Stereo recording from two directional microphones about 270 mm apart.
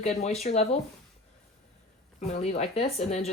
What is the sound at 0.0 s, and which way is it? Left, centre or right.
Speech, left.